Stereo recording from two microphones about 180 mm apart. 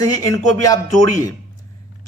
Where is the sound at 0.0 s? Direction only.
20° left (ahead or behind).